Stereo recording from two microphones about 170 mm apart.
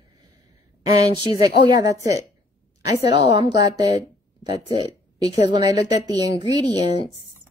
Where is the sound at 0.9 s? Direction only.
20° right (ahead or behind).